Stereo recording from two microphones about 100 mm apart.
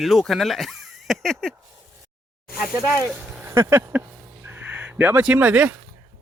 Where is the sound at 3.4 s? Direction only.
25° right (ahead or behind).